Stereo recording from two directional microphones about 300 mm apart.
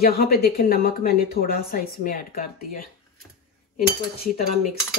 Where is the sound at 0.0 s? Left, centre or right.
Left.